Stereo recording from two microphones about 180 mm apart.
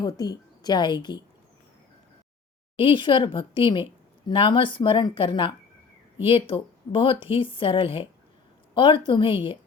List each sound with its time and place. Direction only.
0.0 s a woman's voice: 20° left (ahead or behind)
2.7 s a woman's voice: 30° left (ahead or behind)